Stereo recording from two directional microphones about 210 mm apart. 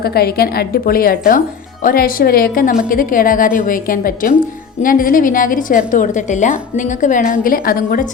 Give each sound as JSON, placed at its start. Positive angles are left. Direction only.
{"t": 0.0, "sound": "a woman's voice", "side_deg": 45}